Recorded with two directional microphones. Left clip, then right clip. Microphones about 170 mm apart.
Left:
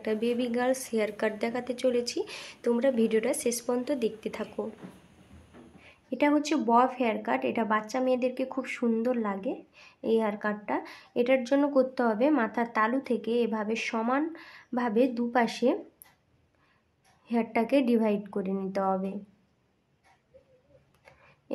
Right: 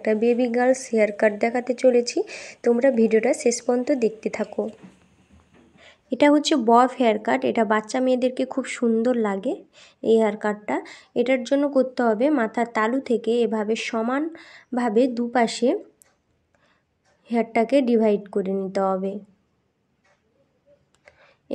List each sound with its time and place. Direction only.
0.0 s a woman's voice: 30° right (ahead or behind)
5.9 s a woman's voice: 35° right (ahead or behind); by 15.8 s 20° right (ahead or behind)
17.2 s a woman's voice: 20° right (ahead or behind)